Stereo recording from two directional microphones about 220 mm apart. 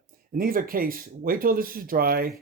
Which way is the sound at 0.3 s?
40° right (ahead or behind).